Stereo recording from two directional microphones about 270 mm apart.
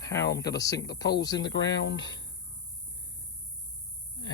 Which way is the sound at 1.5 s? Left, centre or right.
Left.